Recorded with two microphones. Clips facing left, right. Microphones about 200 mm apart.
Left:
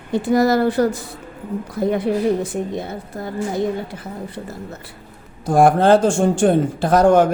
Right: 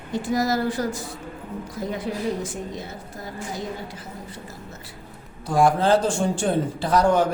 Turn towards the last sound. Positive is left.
turn(degrees=50)  # may be behind; listen again after turning